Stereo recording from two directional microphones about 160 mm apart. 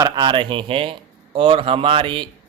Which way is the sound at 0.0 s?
30° right (ahead or behind).